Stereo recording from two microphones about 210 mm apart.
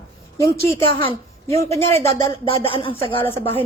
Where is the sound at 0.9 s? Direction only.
25° left (ahead or behind).